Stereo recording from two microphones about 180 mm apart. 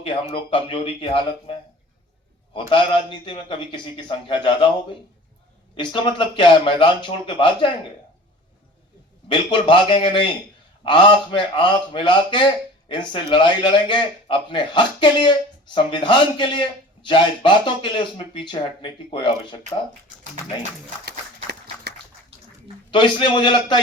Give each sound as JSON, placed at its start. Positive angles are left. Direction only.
{"t": 0.0, "sound": "a man's voice", "side_deg": 30}
{"t": 2.5, "sound": "a man's voice", "side_deg": 25}
{"t": 5.7, "sound": "a man's voice", "side_deg": 25}
{"t": 9.3, "sound": "a man's voice", "side_deg": 25}
{"t": 21.5, "sound": "a sound", "side_deg": -70}
{"t": 22.9, "sound": "a man's voice", "side_deg": 25}